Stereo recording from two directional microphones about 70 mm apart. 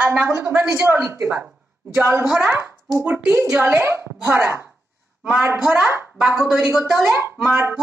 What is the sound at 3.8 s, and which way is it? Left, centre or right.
Speech, right.